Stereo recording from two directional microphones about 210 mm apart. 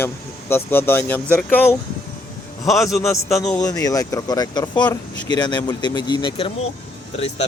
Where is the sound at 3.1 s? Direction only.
15° left (ahead or behind).